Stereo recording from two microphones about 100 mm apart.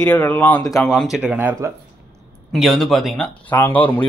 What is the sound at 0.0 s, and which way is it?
Speech, 20° left (ahead or behind).